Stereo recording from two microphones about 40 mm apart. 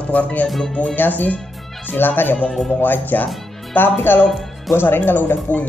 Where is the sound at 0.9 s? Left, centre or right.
Left.